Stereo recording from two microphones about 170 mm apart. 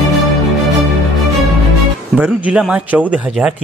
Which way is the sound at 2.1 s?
5° right (ahead or behind).